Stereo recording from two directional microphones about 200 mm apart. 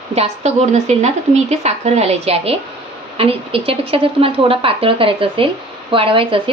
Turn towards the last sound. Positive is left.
turn(degrees=-25)  # may be behind; listen again after turning